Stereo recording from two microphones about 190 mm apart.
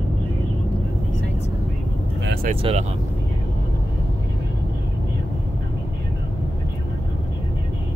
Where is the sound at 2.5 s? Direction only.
30° right (ahead or behind).